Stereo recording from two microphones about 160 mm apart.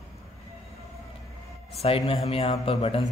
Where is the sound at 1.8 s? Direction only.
35° left (ahead or behind).